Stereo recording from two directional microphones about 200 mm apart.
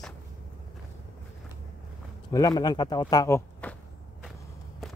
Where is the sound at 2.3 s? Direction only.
20° left (ahead or behind).